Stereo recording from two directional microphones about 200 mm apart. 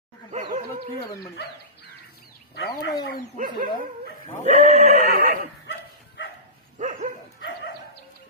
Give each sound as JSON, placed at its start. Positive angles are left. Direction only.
{"t": 0.3, "sound": "a sound", "side_deg": -40}
{"t": 2.6, "sound": "speech", "side_deg": 55}
{"t": 3.3, "sound": "neigh", "side_deg": -45}
{"t": 4.4, "sound": "speech", "side_deg": -35}
{"t": 5.0, "sound": "neigh", "side_deg": -50}
{"t": 6.7, "sound": "dog", "side_deg": -40}
{"t": 7.4, "sound": "bow-wow", "side_deg": 60}